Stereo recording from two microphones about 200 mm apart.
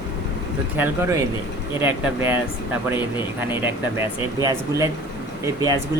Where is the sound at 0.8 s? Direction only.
10° right (ahead or behind).